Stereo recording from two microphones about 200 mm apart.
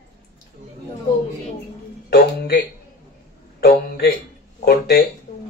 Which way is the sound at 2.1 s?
55° left (ahead or behind).